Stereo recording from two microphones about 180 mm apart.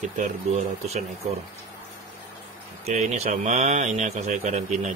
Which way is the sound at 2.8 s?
40° right (ahead or behind).